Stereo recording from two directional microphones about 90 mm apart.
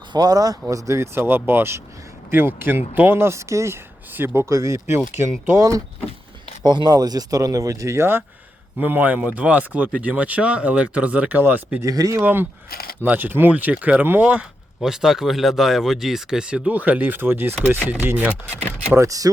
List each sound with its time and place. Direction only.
0.1 s speech: 45° right (ahead or behind)
6.7 s speech: 55° right (ahead or behind); by 8.2 s 30° right (ahead or behind)
8.8 s speech: 20° right (ahead or behind)
11.8 s speech: 40° right (ahead or behind)
12.2 s speech: 25° right (ahead or behind)
18.9 s speech: 40° right (ahead or behind)